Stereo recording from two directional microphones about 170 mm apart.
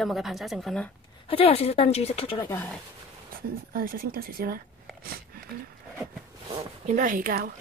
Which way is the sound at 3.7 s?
60° right (ahead or behind).